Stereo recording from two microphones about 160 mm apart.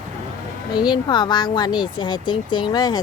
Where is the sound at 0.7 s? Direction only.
25° left (ahead or behind).